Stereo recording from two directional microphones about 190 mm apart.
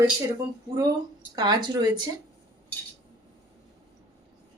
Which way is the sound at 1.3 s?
20° right (ahead or behind).